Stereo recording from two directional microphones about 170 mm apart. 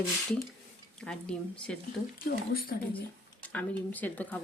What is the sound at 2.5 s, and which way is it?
Speech, 60° left (ahead or behind).